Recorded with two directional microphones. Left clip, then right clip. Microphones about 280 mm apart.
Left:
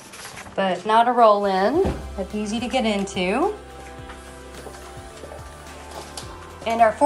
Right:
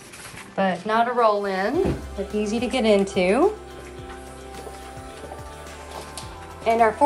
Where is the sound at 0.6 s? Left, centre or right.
Centre.